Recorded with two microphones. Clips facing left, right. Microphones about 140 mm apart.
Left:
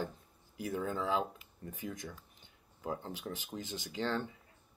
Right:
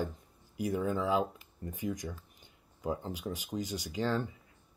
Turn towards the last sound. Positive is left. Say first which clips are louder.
# right 3 dB
turn(degrees=-10)  # may be behind; listen again after turning